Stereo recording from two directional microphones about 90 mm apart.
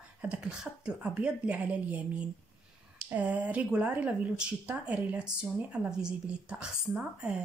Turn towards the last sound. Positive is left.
turn(degrees=-10)  # may be behind; listen again after turning